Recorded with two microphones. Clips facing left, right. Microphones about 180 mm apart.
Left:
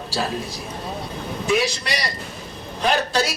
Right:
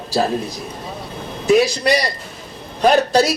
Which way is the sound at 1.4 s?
40° right (ahead or behind).